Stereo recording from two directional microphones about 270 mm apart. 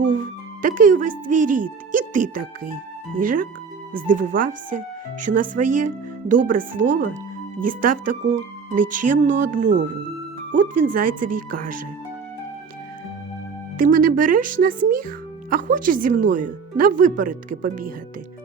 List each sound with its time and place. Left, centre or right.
0.1 s speech: right
13.7 s speech: right